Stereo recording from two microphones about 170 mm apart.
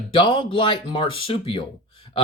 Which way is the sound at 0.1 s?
30° left (ahead or behind).